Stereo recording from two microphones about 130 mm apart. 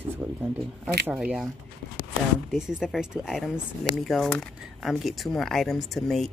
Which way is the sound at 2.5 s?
5° right (ahead or behind).